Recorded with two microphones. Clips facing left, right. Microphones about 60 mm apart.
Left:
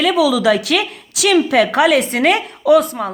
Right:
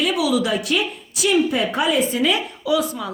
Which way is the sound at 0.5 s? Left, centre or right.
Left.